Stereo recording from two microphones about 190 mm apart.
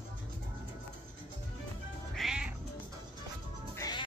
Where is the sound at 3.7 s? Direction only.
20° left (ahead or behind).